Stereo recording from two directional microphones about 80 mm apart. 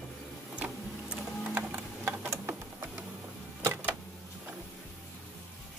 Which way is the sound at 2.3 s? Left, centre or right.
Right.